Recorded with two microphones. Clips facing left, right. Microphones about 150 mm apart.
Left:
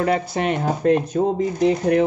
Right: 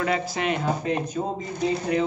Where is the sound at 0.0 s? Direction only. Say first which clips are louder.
Left 5 dB; 40° left (ahead or behind).